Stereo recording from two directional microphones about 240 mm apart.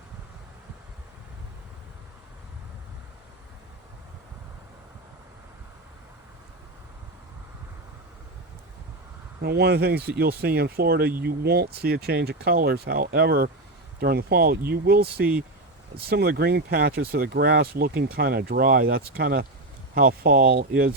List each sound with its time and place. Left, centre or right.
9.4 s speech: right